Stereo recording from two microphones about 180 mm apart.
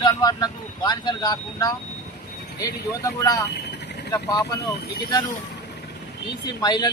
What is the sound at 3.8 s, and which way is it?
Vehicle, 65° left (ahead or behind).